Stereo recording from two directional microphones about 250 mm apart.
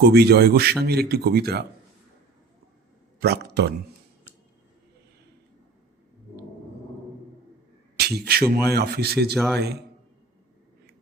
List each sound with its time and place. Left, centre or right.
0.0 s speech: right
3.2 s speech: right
7.9 s speech: right
9.3 s a man's voice: centre